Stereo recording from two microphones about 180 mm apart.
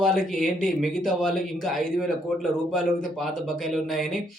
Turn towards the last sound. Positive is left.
turn(degrees=0)  # may be behind; listen again after turning